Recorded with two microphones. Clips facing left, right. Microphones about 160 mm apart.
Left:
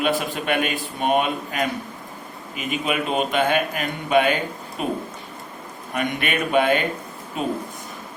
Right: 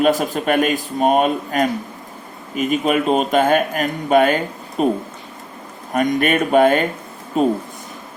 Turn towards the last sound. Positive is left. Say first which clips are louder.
# right 9 dB
turn(degrees=-40)  # may be behind; listen again after turning